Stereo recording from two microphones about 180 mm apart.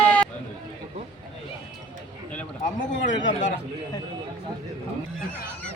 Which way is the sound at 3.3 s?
45° left (ahead or behind).